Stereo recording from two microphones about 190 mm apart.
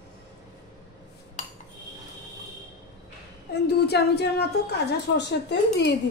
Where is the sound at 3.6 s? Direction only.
60° left (ahead or behind).